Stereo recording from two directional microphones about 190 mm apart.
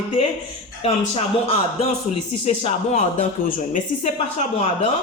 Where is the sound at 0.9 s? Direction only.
30° left (ahead or behind).